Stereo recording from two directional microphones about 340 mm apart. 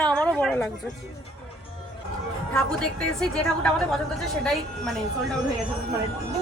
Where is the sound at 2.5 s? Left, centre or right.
Centre.